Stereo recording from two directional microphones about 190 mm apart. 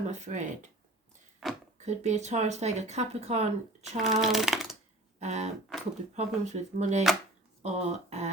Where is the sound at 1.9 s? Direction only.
35° right (ahead or behind).